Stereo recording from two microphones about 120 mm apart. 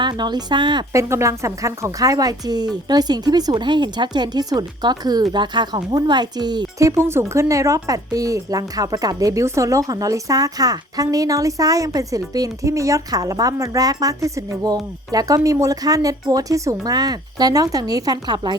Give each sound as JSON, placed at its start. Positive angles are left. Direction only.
{"t": 0.0, "sound": "a woman's voice", "side_deg": -35}
{"t": 0.9, "sound": "a woman's voice", "side_deg": -25}